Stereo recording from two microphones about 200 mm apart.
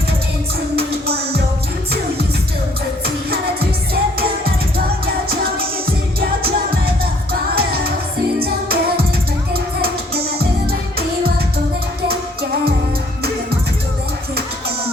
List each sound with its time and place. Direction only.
0.8 s music: 50° right (ahead or behind)
6.1 s music: 50° right (ahead or behind)